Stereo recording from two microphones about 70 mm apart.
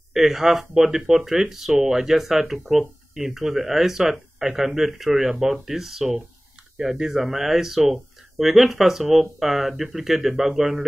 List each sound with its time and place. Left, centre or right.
0.1 s speech: centre